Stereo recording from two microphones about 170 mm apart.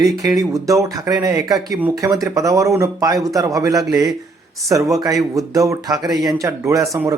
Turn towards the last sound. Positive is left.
turn(degrees=-20)  # may be behind; listen again after turning